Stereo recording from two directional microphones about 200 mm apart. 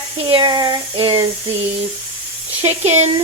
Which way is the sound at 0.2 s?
25° right (ahead or behind).